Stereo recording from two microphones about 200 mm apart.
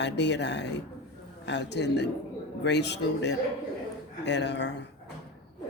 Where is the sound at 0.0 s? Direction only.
60° left (ahead or behind).